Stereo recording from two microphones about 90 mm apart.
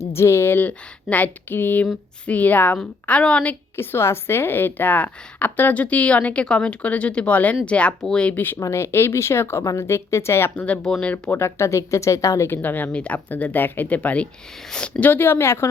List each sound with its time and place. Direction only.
0.1 s a woman's voice: 30° left (ahead or behind); by 3.5 s 10° left (ahead or behind)
3.8 s a woman's voice: 30° left (ahead or behind)
10.5 s a woman's voice: 15° left (ahead or behind); by 12.5 s 35° left (ahead or behind)
12.5 s speech: 20° left (ahead or behind)